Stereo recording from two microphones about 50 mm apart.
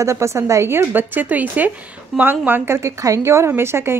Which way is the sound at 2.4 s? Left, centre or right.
Right.